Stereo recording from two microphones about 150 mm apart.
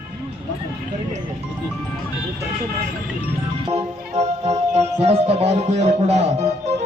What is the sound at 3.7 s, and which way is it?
Music, 45° right (ahead or behind).